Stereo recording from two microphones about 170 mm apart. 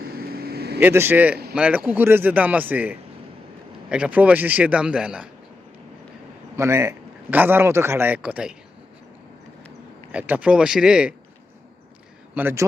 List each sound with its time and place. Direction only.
0.0 s vehicle: 65° right (ahead or behind)
0.8 s a man's voice: 10° right (ahead or behind)
6.6 s a man's voice: 15° right (ahead or behind)
10.1 s a man's voice: 10° right (ahead or behind)
12.3 s a man's voice: 10° right (ahead or behind)